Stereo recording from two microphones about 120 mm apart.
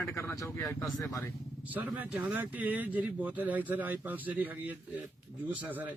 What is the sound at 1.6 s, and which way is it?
Speech, 15° right (ahead or behind).